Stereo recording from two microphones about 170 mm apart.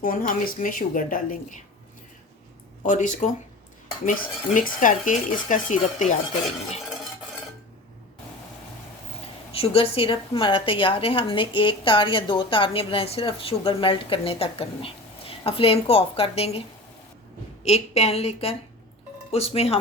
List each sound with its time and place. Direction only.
0.0 s a woman's voice: 55° left (ahead or behind)
2.8 s a woman's voice: 50° left (ahead or behind)
4.5 s a woman's voice: 50° left (ahead or behind)
9.5 s a woman's voice: 35° left (ahead or behind)